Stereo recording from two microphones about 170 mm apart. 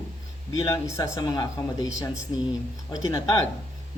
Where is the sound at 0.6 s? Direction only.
20° left (ahead or behind).